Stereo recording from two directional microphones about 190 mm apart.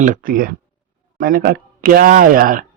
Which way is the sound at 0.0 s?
45° right (ahead or behind).